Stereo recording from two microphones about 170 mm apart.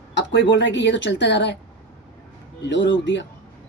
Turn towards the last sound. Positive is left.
turn(degrees=90)